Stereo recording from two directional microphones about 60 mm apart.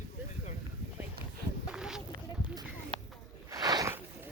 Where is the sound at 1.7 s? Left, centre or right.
Centre.